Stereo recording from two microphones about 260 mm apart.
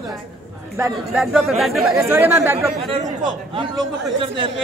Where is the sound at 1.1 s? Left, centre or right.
Centre.